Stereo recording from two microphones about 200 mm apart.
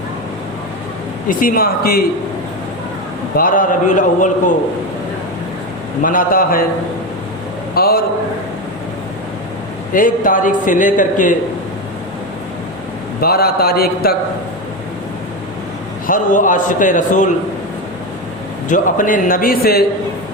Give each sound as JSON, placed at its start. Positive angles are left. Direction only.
{"t": 1.3, "sound": "a man's voice", "side_deg": 45}
{"t": 3.3, "sound": "a man's voice", "side_deg": 45}
{"t": 6.0, "sound": "a man's voice", "side_deg": 45}
{"t": 7.8, "sound": "a man's voice", "side_deg": 50}
{"t": 9.9, "sound": "a man's voice", "side_deg": 40}
{"t": 13.2, "sound": "a man's voice", "side_deg": 50}
{"t": 16.0, "sound": "a man's voice", "side_deg": 40}
{"t": 18.7, "sound": "a man's voice", "side_deg": 40}